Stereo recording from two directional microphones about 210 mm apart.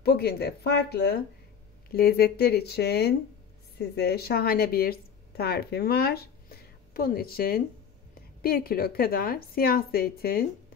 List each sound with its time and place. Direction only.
0.0 s a woman's voice: 50° left (ahead or behind)